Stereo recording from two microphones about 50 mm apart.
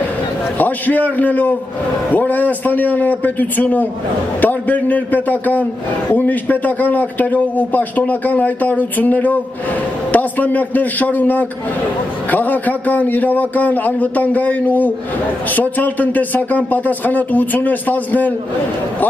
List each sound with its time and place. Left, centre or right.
0.6 s a man's voice: left